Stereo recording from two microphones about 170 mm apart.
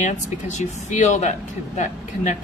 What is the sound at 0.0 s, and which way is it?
Speech, 45° left (ahead or behind).